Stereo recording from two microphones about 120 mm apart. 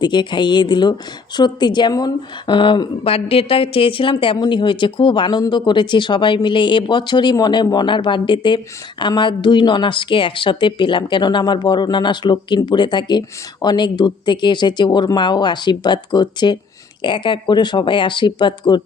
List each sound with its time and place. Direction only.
0.0 s a woman's voice: 40° left (ahead or behind)
3.0 s a woman's voice: 55° left (ahead or behind)